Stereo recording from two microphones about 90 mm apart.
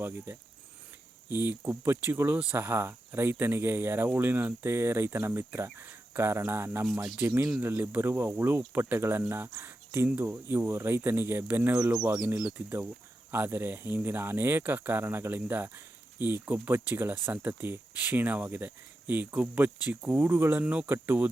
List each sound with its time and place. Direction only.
1.3 s speech: 25° right (ahead or behind)
10.1 s speech: 15° right (ahead or behind)